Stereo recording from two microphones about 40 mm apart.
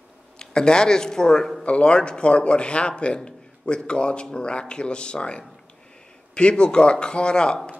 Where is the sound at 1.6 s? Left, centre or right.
Left.